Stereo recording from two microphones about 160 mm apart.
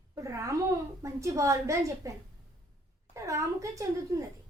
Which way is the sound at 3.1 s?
20° right (ahead or behind).